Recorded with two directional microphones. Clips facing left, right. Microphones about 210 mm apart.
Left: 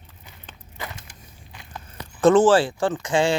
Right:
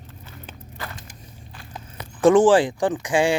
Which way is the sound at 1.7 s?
10° right (ahead or behind).